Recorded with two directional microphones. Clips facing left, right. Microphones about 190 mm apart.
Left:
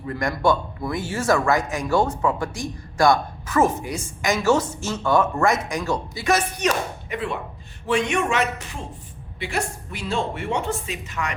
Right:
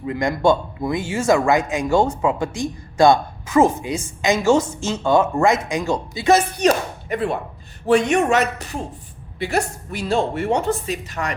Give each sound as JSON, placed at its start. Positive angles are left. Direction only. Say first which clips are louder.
{"t": 0.0, "sound": "a man's voice", "louder": "right 4 dB", "side_deg": -20}
{"t": 6.2, "sound": "a woman's voice", "louder": "right 6 dB", "side_deg": -30}